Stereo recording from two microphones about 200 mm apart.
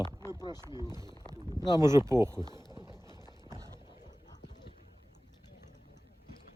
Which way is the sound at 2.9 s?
20° left (ahead or behind).